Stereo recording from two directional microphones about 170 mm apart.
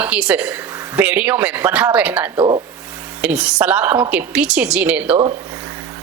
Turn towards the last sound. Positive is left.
turn(degrees=-10)  # may be behind; listen again after turning